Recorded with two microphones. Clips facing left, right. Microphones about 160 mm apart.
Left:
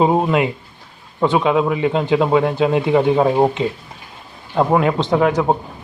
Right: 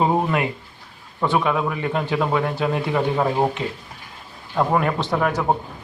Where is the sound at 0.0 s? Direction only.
20° left (ahead or behind).